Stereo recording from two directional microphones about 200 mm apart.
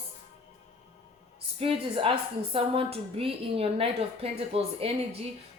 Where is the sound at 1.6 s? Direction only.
30° right (ahead or behind).